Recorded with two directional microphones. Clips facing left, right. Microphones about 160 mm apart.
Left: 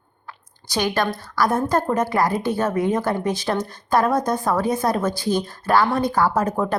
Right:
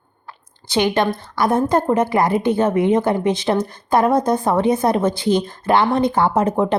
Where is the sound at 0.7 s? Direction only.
20° right (ahead or behind).